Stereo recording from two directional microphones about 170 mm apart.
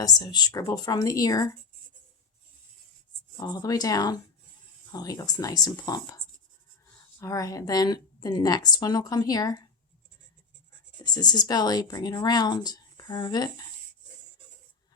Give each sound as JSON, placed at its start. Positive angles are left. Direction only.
{"t": 0.0, "sound": "speech", "side_deg": 20}
{"t": 3.3, "sound": "speech", "side_deg": 25}
{"t": 11.0, "sound": "speech", "side_deg": 25}